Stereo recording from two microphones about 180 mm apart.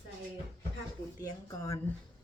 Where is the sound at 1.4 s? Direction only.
15° left (ahead or behind).